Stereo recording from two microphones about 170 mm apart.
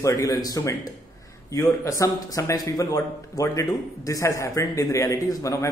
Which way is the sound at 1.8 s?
20° left (ahead or behind).